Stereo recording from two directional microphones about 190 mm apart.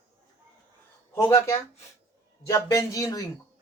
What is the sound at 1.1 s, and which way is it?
A woman's voice, 15° left (ahead or behind).